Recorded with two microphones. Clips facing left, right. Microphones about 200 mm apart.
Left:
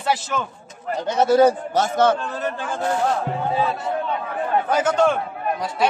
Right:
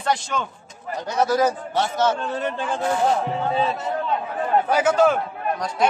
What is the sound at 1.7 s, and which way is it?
Speech, 45° left (ahead or behind).